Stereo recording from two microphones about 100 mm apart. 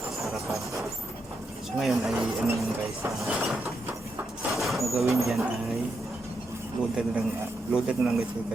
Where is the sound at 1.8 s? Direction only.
5° right (ahead or behind).